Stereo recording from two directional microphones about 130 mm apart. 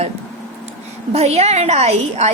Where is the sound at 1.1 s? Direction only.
55° right (ahead or behind).